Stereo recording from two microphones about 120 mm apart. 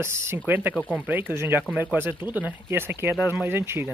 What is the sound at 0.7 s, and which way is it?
Speech, 5° left (ahead or behind).